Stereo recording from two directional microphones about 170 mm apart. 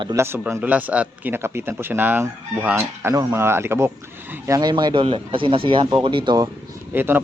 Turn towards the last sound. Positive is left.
turn(degrees=-10)  # may be behind; listen again after turning